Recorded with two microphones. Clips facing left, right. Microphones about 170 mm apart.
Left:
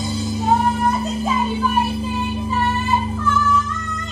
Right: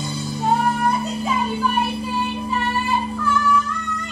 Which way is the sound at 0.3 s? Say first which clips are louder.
Left 1 dB; centre (ahead or behind).